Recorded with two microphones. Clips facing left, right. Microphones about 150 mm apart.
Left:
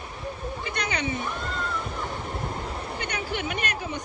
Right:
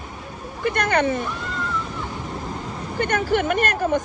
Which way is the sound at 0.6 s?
55° right (ahead or behind).